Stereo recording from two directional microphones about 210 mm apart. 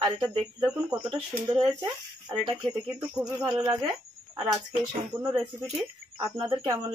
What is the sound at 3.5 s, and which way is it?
Speech, 20° right (ahead or behind).